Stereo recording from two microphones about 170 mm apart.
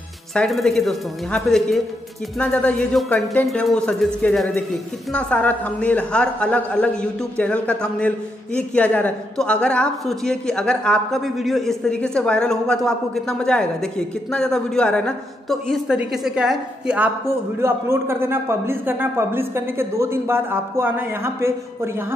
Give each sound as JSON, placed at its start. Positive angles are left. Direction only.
{"t": 0.3, "sound": "a man's voice", "side_deg": 0}